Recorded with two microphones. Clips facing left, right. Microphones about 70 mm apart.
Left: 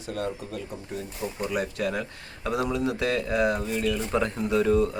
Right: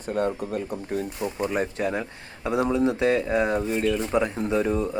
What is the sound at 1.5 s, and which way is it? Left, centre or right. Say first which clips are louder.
Speech: right 1 dB; right.